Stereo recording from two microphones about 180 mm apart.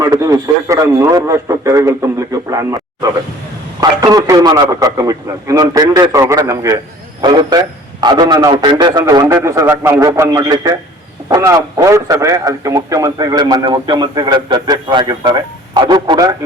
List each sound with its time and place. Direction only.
0.0 s a man's voice: 15° right (ahead or behind)